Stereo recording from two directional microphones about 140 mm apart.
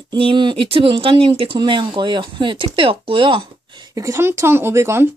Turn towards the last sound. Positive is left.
turn(degrees=-20)  # may be behind; listen again after turning